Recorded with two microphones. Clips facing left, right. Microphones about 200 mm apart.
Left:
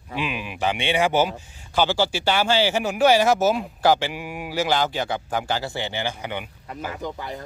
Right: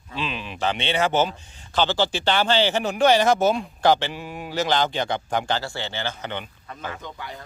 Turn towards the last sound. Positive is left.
turn(degrees=40)  # may be behind; listen again after turning